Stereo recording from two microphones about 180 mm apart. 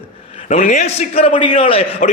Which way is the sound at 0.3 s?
35° left (ahead or behind).